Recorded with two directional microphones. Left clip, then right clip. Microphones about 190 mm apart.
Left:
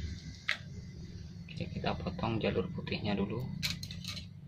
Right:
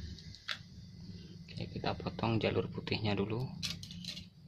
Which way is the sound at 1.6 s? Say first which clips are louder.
Left 1 dB; 40° right (ahead or behind).